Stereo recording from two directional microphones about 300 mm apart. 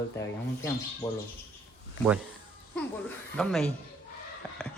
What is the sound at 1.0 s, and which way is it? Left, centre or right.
Speech, centre.